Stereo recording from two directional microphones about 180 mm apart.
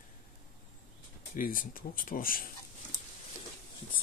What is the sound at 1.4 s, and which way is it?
Speech, 50° left (ahead or behind).